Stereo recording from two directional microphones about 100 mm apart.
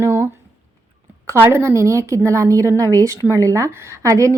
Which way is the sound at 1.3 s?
25° right (ahead or behind).